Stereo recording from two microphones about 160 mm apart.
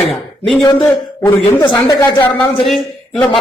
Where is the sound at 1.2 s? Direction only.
15° left (ahead or behind).